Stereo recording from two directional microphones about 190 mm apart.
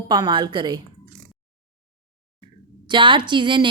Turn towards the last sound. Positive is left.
turn(degrees=-25)  # may be behind; listen again after turning